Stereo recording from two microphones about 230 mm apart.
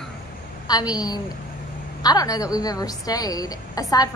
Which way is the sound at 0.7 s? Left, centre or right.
Centre.